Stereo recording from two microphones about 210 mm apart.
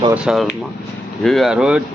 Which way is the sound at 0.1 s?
5° right (ahead or behind).